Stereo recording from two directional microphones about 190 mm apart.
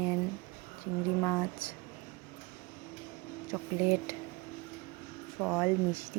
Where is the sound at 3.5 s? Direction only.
15° right (ahead or behind).